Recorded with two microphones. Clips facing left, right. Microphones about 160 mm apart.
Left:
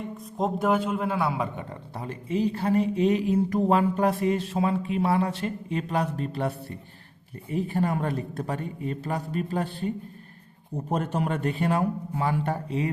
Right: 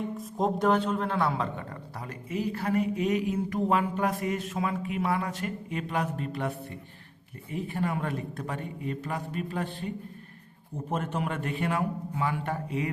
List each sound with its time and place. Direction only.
0.0 s speech: centre (ahead or behind)
2.0 s speech: 30° left (ahead or behind)